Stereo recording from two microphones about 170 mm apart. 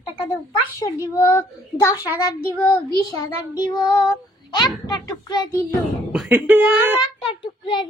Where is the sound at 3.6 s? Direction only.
25° left (ahead or behind).